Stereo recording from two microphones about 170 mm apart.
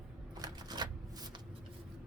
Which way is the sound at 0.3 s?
25° right (ahead or behind).